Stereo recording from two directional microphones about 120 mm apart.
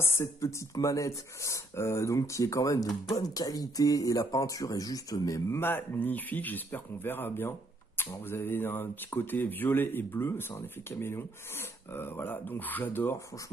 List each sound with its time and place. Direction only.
0.0 s speech: 20° left (ahead or behind)